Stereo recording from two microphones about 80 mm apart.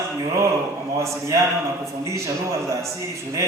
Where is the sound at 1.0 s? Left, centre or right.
Right.